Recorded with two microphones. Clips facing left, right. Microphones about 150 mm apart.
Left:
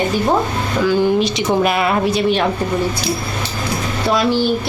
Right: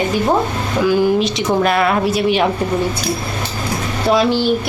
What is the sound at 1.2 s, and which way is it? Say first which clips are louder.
Speech: even; centre (ahead or behind).